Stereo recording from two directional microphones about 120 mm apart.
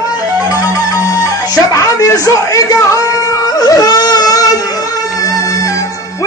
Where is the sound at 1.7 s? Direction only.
25° left (ahead or behind).